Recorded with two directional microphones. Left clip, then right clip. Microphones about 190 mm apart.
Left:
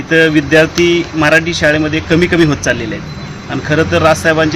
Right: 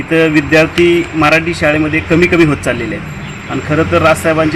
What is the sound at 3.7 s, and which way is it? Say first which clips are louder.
Speech: even; 25° left (ahead or behind).